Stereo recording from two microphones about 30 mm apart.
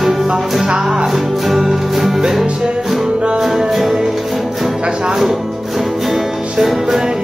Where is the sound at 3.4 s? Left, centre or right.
Centre.